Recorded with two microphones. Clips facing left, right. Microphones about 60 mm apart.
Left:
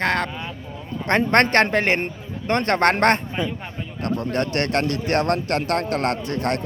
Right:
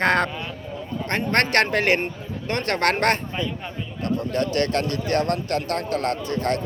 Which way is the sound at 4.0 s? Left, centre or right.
Left.